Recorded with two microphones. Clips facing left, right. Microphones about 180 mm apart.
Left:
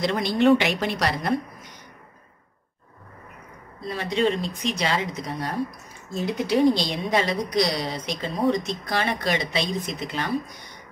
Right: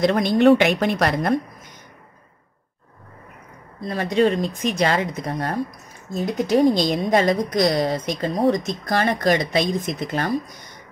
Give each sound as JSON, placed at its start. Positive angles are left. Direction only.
{"t": 0.0, "sound": "speech", "side_deg": -50}
{"t": 3.9, "sound": "speech", "side_deg": -45}